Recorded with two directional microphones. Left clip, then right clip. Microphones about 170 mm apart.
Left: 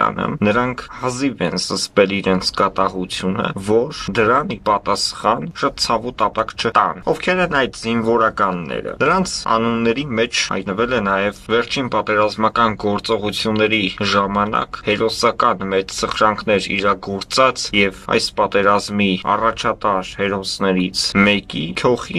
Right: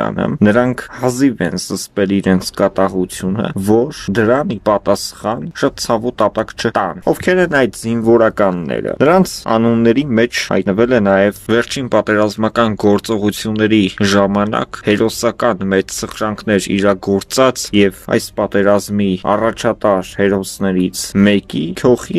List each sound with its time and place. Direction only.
0.0 s speech: 45° right (ahead or behind)